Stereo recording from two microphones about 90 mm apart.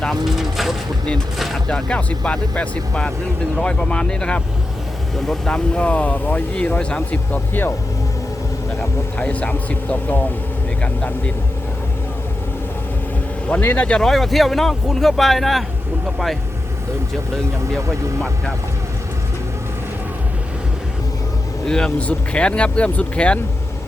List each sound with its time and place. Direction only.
0.0 s speech: centre (ahead or behind)
1.6 s speech: 10° left (ahead or behind)
9.1 s speech: 15° left (ahead or behind)
13.5 s speech: 20° left (ahead or behind); by 16.4 s centre (ahead or behind)
21.7 s speech: 10° left (ahead or behind)